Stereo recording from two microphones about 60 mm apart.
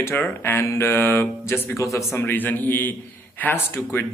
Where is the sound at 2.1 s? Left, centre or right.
Left.